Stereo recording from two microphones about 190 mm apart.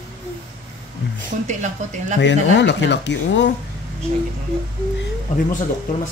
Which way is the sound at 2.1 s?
65° left (ahead or behind).